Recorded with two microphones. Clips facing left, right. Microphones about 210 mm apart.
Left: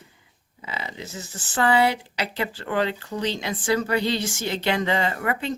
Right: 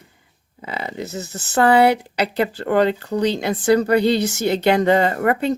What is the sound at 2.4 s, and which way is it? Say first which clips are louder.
Speech: right 8 dB; 40° right (ahead or behind).